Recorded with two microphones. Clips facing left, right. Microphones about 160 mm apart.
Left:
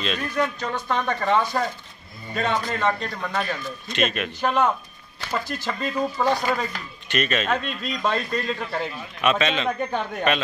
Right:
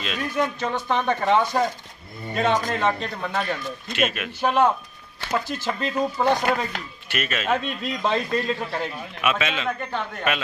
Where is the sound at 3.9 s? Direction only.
10° right (ahead or behind).